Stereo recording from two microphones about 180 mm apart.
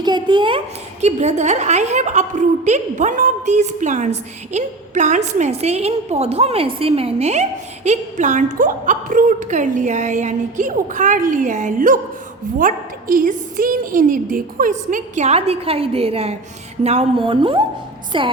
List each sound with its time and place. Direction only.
0.0 s speech: 25° right (ahead or behind)
1.0 s a woman's voice: 40° right (ahead or behind)